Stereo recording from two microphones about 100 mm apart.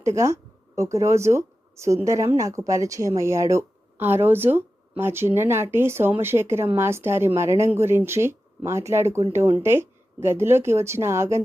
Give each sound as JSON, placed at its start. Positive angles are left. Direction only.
{"t": 0.0, "sound": "speech", "side_deg": -30}